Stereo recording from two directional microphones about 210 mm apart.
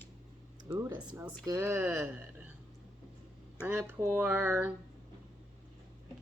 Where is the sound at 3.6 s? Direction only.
10° right (ahead or behind).